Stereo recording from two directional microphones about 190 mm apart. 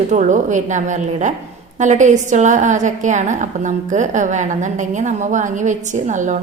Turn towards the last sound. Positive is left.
turn(degrees=-40)  # may be behind; listen again after turning